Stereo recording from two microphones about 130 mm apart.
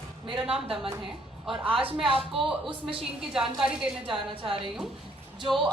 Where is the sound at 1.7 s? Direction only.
40° right (ahead or behind).